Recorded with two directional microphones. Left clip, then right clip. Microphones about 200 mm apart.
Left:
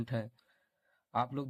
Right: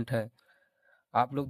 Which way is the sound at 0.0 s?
35° right (ahead or behind).